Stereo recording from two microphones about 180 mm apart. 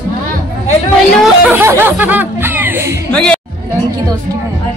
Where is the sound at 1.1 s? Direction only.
5° right (ahead or behind).